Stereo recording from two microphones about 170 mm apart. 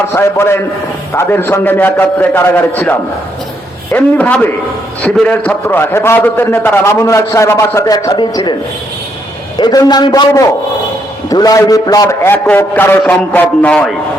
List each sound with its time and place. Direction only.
0.1 s a man's voice: 15° left (ahead or behind)
3.9 s a man's voice: 10° left (ahead or behind); by 8.5 s 25° left (ahead or behind)
9.6 s a man's voice: 25° left (ahead or behind); by 13.9 s 5° left (ahead or behind)